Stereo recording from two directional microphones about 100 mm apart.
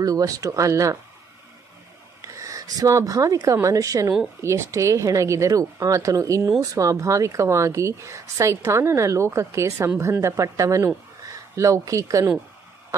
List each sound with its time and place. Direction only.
0.0 s a woman's voice: 35° right (ahead or behind)
2.2 s a woman's voice: 35° right (ahead or behind)